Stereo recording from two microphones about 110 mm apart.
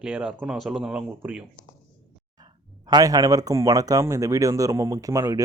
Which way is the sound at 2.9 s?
35° right (ahead or behind).